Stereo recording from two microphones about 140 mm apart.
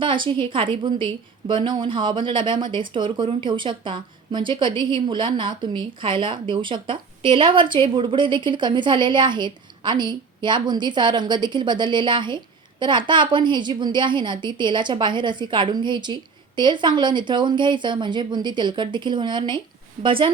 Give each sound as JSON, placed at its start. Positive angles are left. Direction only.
{"t": 0.0, "sound": "speech", "side_deg": -35}